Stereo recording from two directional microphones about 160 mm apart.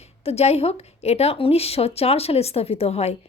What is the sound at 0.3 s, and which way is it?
Speech, 40° left (ahead or behind).